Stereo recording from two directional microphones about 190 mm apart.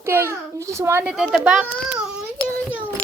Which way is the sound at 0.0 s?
15° right (ahead or behind).